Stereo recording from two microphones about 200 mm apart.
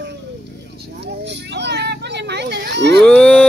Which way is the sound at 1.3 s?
60° right (ahead or behind).